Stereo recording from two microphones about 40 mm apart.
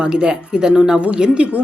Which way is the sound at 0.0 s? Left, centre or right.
Right.